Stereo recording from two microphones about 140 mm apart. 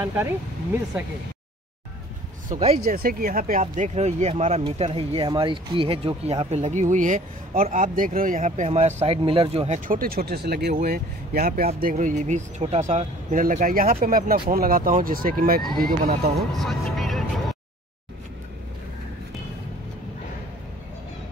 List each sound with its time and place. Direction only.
2.8 s speech: 90° right; by 6.4 s 45° right (ahead or behind)
6.5 s speech: 55° right (ahead or behind)
9.8 s speech: 90° right
11.9 s speech: 60° right (ahead or behind); by 16.2 s 90° right
16.3 s music: centre (ahead or behind)